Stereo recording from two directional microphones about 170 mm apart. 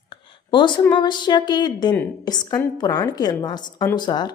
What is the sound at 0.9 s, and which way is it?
Speech, 25° left (ahead or behind).